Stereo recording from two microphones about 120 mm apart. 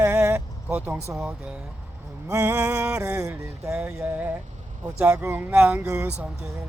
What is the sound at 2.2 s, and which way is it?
Male singing, 25° right (ahead or behind).